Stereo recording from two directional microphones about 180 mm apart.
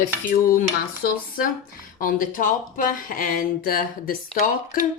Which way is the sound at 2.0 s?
50° left (ahead or behind).